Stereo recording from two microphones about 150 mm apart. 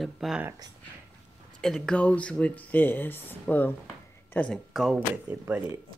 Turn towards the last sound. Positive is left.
turn(degrees=-15)  # may be behind; listen again after turning